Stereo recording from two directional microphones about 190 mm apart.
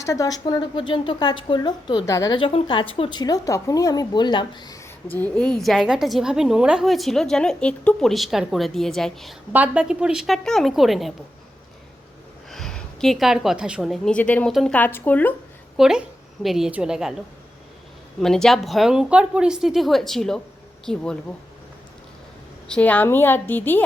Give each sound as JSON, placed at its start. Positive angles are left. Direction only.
{"t": 0.0, "sound": "speech", "side_deg": 15}
{"t": 5.1, "sound": "a woman's voice", "side_deg": 5}
{"t": 12.5, "sound": "a woman's voice", "side_deg": 0}
{"t": 15.8, "sound": "a woman's voice", "side_deg": -5}
{"t": 18.2, "sound": "a woman's voice", "side_deg": 0}
{"t": 22.7, "sound": "a woman's voice", "side_deg": 5}